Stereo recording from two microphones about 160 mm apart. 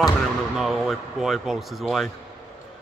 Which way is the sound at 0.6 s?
Centre (ahead or behind).